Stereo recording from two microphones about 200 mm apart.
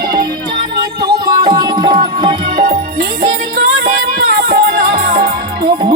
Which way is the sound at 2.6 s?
45° right (ahead or behind).